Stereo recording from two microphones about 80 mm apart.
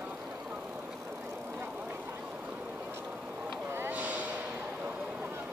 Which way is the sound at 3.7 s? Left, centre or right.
Right.